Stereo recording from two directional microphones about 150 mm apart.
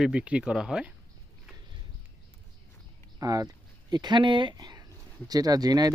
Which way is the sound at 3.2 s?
25° right (ahead or behind).